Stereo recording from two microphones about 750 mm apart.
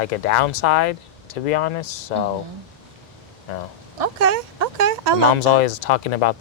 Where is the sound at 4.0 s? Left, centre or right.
Right.